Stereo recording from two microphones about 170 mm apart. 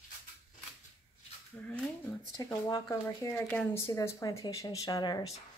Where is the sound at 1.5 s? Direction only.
10° left (ahead or behind).